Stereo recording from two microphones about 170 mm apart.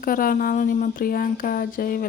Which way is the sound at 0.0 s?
55° left (ahead or behind).